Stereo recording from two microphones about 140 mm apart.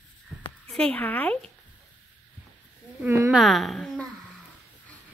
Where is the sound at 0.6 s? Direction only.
10° left (ahead or behind).